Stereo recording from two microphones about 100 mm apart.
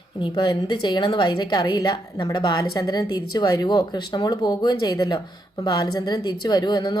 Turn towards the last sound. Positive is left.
turn(degrees=40)  # may be behind; listen again after turning